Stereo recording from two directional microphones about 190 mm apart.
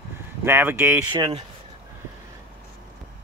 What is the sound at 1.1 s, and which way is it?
Speech, 25° right (ahead or behind).